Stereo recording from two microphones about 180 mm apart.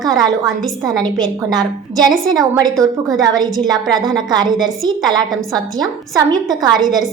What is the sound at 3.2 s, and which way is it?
A woman's voice, 25° right (ahead or behind).